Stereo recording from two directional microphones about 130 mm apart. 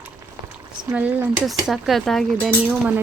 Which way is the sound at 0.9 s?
10° right (ahead or behind).